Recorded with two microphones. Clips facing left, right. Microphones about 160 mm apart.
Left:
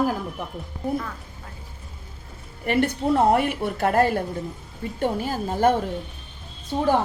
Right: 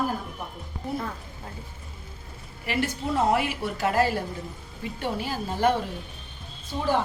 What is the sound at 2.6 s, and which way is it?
A woman's voice, 55° left (ahead or behind).